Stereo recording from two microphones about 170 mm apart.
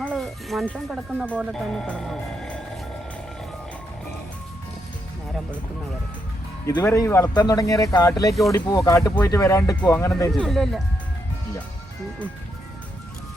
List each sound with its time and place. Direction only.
0.2 s speech: centre (ahead or behind)
0.9 s speech: 5° right (ahead or behind)
6.7 s speech: 20° left (ahead or behind)
8.3 s speech: centre (ahead or behind)
8.5 s speech: 20° left (ahead or behind)
10.3 s speech: centre (ahead or behind)